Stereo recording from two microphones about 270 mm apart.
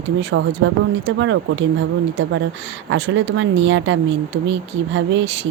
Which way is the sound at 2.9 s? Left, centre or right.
Right.